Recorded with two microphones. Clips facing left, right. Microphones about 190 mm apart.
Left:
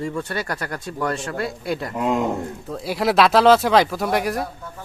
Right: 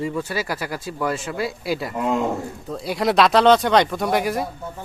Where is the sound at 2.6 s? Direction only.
Centre (ahead or behind).